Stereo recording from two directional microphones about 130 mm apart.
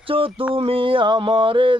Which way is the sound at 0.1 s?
45° right (ahead or behind).